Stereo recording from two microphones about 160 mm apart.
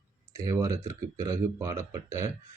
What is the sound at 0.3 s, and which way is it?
A man's voice, 20° right (ahead or behind).